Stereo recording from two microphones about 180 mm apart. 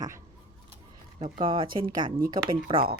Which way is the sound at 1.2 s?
30° right (ahead or behind).